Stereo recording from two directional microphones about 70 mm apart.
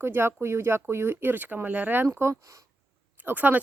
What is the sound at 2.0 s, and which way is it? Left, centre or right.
Speech, right.